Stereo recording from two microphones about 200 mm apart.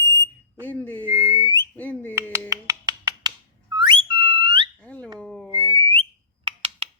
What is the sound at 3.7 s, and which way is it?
Whistle, 25° right (ahead or behind).